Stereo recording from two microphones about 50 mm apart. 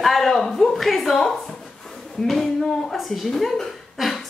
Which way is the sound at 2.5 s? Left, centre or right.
Centre.